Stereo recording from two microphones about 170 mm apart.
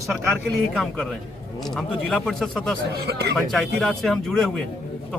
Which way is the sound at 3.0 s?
75° right (ahead or behind).